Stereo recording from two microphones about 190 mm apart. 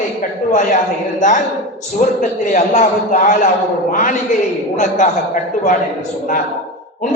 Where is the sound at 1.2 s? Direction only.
40° left (ahead or behind).